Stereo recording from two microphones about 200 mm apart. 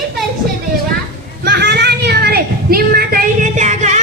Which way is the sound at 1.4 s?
60° right (ahead or behind).